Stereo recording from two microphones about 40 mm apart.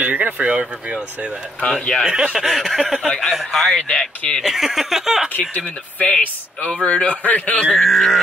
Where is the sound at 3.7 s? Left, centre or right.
Centre.